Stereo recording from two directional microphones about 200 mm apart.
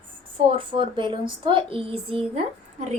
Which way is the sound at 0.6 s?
25° right (ahead or behind).